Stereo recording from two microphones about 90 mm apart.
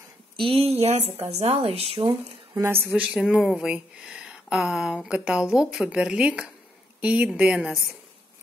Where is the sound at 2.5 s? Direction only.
30° right (ahead or behind).